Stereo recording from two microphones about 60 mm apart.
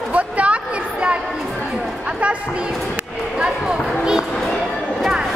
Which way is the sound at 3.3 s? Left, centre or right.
Centre.